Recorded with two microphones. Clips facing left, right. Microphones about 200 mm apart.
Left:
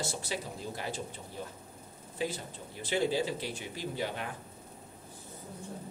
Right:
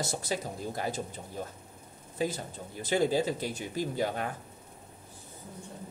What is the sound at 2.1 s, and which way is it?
A man's voice, 40° right (ahead or behind).